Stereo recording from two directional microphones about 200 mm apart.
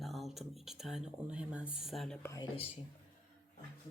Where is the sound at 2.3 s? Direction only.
25° left (ahead or behind).